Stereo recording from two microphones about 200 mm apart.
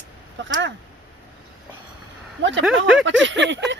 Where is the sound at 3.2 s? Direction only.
65° right (ahead or behind).